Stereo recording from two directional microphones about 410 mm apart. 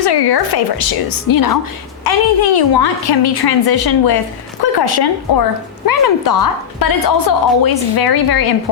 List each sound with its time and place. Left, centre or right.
0.0 s speech: left
2.0 s speech: left